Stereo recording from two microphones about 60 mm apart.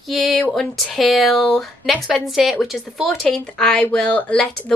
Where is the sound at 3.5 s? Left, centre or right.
Centre.